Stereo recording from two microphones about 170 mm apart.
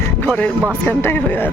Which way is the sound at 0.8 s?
15° left (ahead or behind).